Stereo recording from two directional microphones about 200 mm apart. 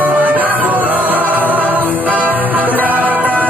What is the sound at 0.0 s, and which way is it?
Music, 10° right (ahead or behind).